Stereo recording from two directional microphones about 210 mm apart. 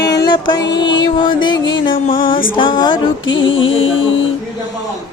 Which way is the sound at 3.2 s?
65° left (ahead or behind).